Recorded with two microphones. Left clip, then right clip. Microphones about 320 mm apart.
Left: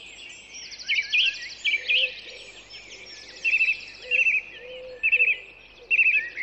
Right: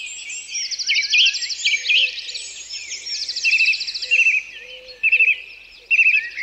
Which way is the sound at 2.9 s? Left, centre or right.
Left.